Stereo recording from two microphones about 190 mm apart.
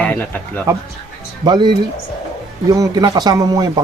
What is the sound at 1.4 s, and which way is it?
Speech, 25° right (ahead or behind).